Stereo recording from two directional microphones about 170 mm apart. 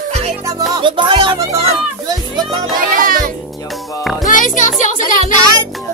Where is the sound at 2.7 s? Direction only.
55° right (ahead or behind).